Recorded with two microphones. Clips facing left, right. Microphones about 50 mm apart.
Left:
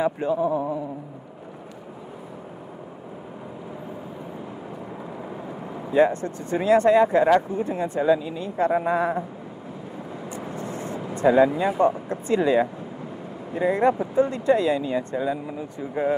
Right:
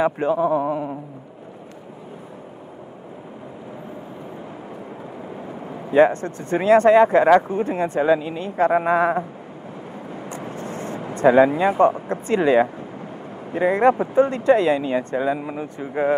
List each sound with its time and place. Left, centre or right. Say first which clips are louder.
0.0 s a man's voice: right 3 dB; right
5.9 s speech: right 4 dB; right
10.3 s speech: right 1 dB; right
15.9 s speech: right 3 dB; right